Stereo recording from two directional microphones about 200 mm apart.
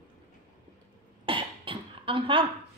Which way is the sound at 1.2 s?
25° right (ahead or behind).